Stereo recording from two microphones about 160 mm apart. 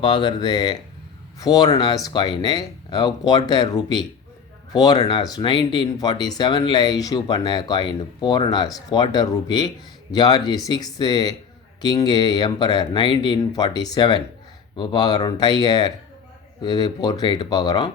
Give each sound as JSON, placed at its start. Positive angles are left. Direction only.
{"t": 0.0, "sound": "speech", "side_deg": 30}